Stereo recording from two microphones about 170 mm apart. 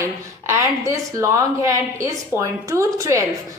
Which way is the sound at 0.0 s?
15° right (ahead or behind).